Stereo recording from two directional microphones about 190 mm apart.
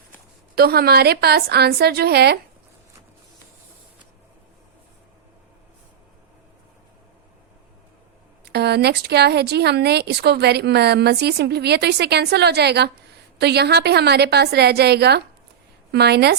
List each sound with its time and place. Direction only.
0.5 s speech: 55° right (ahead or behind)
8.4 s speech: 60° right (ahead or behind)